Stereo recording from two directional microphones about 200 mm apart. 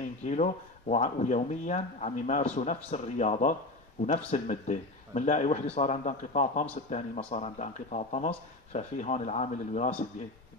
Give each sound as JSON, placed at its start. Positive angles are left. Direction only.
{"t": 0.0, "sound": "speech", "side_deg": 35}